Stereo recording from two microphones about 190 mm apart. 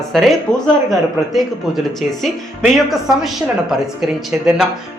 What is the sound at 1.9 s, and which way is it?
A woman's voice, centre (ahead or behind).